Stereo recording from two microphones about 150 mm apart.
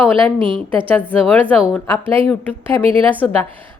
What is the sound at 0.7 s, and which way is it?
A woman's voice, 10° left (ahead or behind).